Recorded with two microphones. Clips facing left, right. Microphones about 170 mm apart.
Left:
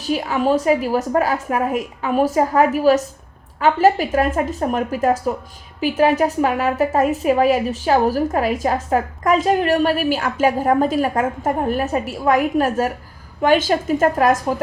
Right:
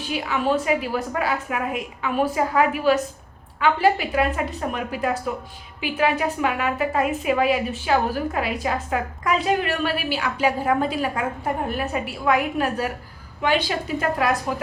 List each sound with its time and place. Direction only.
0.0 s a woman's voice: 40° left (ahead or behind)